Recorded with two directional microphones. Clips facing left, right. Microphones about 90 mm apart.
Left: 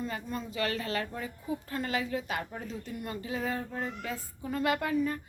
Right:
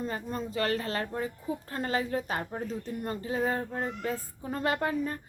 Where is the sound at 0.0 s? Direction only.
40° right (ahead or behind).